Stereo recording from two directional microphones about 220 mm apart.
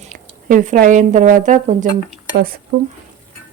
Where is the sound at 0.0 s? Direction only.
35° right (ahead or behind).